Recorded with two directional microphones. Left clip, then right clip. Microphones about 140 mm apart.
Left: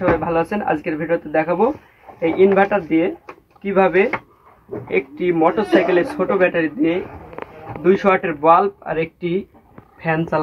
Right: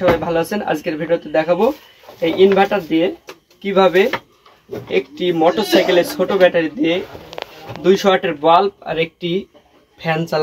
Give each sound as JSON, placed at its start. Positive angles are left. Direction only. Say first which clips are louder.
{"t": 0.2, "sound": "speech", "louder": "right 1 dB", "side_deg": -10}